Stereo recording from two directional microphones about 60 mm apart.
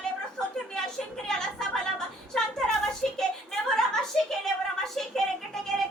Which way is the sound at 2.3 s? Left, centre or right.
Centre.